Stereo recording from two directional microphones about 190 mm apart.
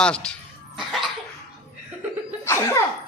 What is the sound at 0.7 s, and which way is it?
Cough, centre (ahead or behind).